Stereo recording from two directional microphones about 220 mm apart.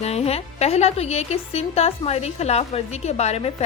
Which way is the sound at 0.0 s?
30° left (ahead or behind).